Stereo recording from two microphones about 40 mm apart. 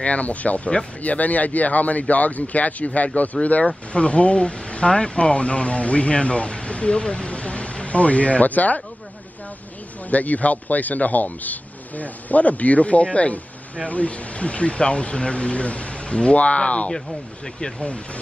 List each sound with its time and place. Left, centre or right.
0.0 s speech: left
10.0 s speech: left
17.6 s speech: centre